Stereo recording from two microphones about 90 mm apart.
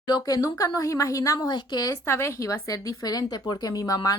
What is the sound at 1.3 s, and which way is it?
Speech, 55° left (ahead or behind).